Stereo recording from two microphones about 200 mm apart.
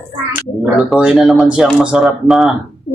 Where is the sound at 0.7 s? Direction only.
Centre (ahead or behind).